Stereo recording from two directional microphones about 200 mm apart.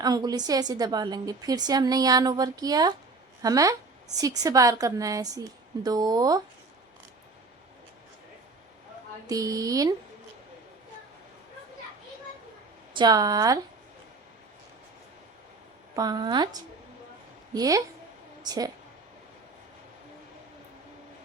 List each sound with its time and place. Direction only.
0.0 s a woman's voice: 20° right (ahead or behind)
9.2 s a woman's voice: 15° right (ahead or behind)
12.9 s a woman's voice: 20° right (ahead or behind)
16.0 s a woman's voice: 20° right (ahead or behind)